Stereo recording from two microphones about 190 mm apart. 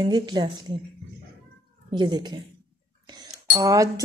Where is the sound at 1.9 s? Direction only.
25° right (ahead or behind).